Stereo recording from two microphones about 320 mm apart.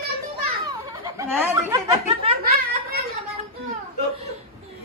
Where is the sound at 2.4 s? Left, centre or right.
Right.